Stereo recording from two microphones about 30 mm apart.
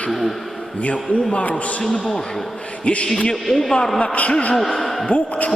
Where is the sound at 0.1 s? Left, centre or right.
Centre.